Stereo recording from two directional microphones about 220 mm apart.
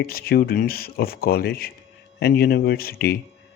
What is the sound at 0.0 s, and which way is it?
Speech, 45° left (ahead or behind).